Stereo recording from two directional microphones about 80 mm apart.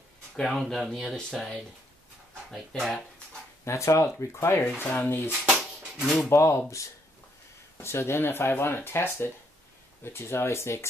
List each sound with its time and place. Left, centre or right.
0.4 s speech: centre
3.6 s speech: left
4.6 s speech: left
5.4 s a sound: centre
6.3 s speech: left
7.7 s speech: left